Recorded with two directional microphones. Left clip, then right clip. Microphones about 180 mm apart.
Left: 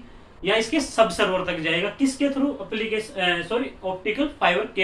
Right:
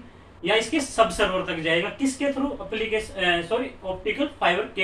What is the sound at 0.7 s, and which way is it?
A man's voice, 20° left (ahead or behind).